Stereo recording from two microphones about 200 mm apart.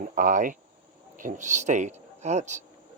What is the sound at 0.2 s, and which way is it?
Speech, 40° right (ahead or behind).